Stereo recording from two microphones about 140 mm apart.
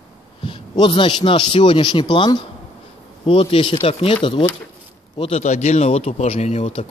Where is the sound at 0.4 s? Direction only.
35° left (ahead or behind).